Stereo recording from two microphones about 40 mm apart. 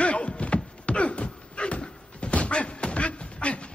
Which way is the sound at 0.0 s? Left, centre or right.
Left.